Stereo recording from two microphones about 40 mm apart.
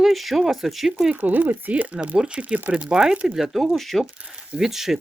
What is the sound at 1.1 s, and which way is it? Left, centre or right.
Speech, right.